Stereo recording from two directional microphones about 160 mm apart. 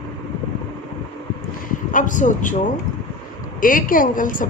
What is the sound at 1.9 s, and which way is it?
Speech, 55° left (ahead or behind).